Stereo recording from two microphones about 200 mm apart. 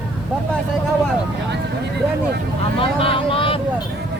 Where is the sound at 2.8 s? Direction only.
30° left (ahead or behind).